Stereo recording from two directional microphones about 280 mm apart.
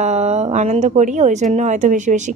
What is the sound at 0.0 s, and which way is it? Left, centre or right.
Speech, right.